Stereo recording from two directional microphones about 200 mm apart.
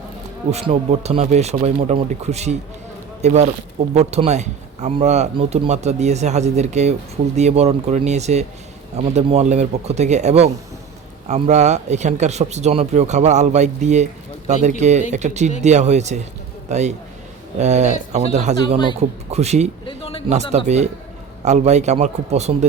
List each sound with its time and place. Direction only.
0.5 s a man's voice: 30° right (ahead or behind)
19.8 s a sound: 25° left (ahead or behind)
20.3 s speech: 35° right (ahead or behind)